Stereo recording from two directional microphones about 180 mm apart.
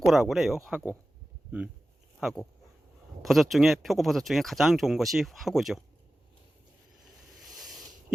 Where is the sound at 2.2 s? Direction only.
Centre (ahead or behind).